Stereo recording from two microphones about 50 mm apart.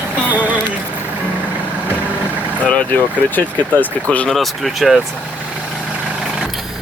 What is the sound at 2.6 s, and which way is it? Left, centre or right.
Speech, left.